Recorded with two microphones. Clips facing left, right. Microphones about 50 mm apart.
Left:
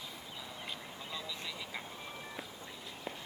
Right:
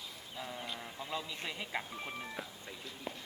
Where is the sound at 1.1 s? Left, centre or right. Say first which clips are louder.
Right 3 dB; right.